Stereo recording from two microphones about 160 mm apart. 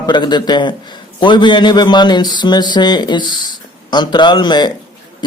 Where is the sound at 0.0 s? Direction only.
25° left (ahead or behind).